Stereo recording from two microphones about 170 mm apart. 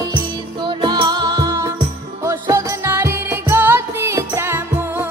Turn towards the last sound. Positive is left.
turn(degrees=-15)  # may be behind; listen again after turning